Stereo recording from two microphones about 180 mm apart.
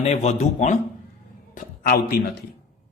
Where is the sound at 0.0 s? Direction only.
40° left (ahead or behind).